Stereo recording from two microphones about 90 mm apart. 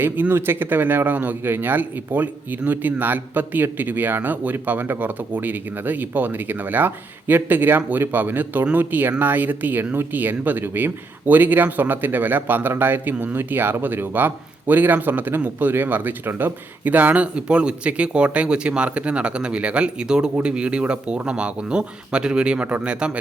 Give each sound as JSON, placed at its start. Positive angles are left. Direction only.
{"t": 0.0, "sound": "speech", "side_deg": -25}